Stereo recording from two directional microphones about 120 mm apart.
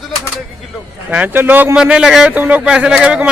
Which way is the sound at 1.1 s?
15° right (ahead or behind).